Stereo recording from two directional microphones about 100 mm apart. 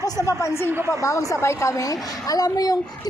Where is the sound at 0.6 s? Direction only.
20° right (ahead or behind).